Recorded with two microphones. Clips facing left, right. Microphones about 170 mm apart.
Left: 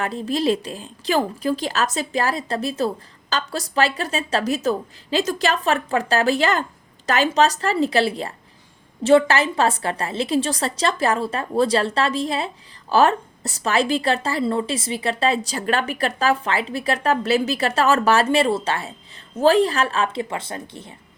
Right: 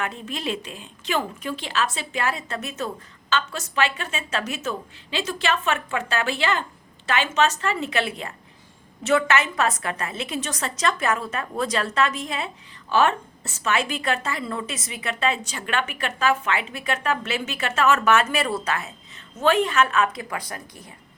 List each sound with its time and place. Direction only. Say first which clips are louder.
0.0 s speech: left 8 dB; 35° left (ahead or behind)